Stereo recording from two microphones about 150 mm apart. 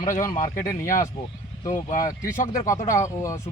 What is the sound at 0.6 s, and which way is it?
Speech, 20° left (ahead or behind).